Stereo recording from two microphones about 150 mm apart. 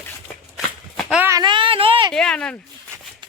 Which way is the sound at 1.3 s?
30° right (ahead or behind).